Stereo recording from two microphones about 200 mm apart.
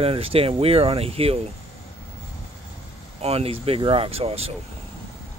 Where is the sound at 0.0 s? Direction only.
30° right (ahead or behind).